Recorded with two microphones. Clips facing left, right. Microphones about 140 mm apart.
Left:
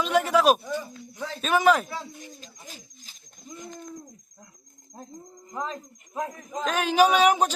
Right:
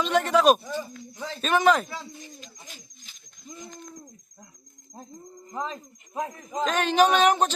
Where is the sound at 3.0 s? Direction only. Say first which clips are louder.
Left 2 dB; 35° left (ahead or behind).